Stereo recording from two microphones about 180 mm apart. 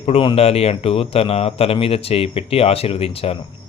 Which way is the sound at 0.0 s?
30° left (ahead or behind).